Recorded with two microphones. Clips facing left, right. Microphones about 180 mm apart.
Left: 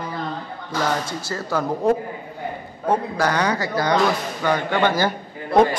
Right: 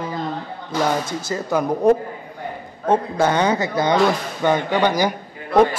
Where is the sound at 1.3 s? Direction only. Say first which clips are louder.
Right 3 dB; 20° right (ahead or behind).